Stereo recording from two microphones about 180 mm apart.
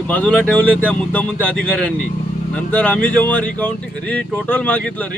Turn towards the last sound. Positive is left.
turn(degrees=5)  # may be behind; listen again after turning